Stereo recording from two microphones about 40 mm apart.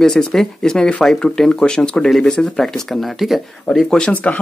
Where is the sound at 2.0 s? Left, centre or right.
Centre.